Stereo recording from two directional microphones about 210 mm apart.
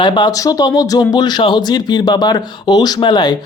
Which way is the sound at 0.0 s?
20° left (ahead or behind).